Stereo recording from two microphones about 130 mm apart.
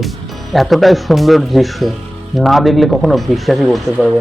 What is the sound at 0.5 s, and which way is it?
Speech, centre (ahead or behind).